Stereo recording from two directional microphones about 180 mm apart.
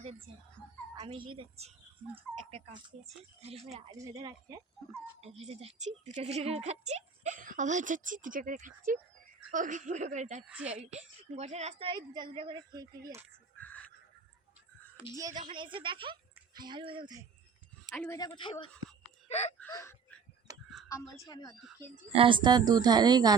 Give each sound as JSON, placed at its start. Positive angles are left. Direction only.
{"t": 0.9, "sound": "speech", "side_deg": -30}
{"t": 3.9, "sound": "a woman's voice", "side_deg": -20}
{"t": 5.4, "sound": "speech", "side_deg": -35}
{"t": 10.4, "sound": "a woman's voice", "side_deg": -5}
{"t": 10.8, "sound": "a woman's voice", "side_deg": -35}
{"t": 13.6, "sound": "a sound", "side_deg": 10}
{"t": 15.1, "sound": "a woman's voice", "side_deg": -20}
{"t": 17.9, "sound": "speech", "side_deg": 5}
{"t": 18.2, "sound": "speech", "side_deg": 25}
{"t": 19.3, "sound": "a sound", "side_deg": 35}
{"t": 19.5, "sound": "gasp", "side_deg": 10}
{"t": 20.5, "sound": "a sound", "side_deg": -20}
{"t": 20.8, "sound": "speech", "side_deg": 20}
{"t": 22.1, "sound": "a woman's voice", "side_deg": -30}